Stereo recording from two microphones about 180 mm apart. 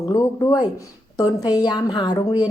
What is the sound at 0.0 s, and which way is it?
Speech, 20° left (ahead or behind).